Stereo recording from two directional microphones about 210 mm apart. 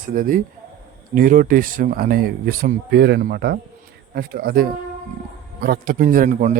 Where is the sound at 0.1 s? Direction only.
40° right (ahead or behind).